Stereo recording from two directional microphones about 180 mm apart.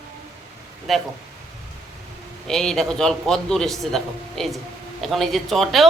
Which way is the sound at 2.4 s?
5° left (ahead or behind).